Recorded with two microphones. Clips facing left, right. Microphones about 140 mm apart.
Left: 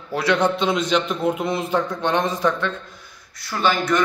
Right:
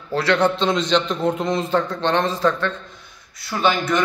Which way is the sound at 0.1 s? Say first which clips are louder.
Right 1 dB; 15° left (ahead or behind).